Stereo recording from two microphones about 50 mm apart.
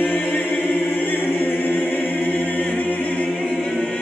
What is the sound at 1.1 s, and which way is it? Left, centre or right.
Choir, left.